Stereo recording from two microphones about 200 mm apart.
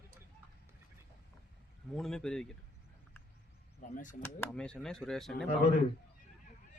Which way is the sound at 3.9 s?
40° left (ahead or behind).